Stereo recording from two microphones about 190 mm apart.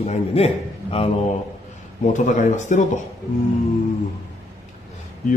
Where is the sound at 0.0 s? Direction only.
35° left (ahead or behind).